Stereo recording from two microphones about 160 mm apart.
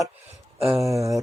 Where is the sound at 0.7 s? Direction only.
20° right (ahead or behind).